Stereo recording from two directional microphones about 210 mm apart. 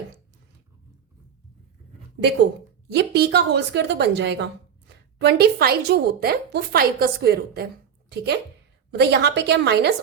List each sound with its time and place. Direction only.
2.9 s a woman's voice: 50° right (ahead or behind)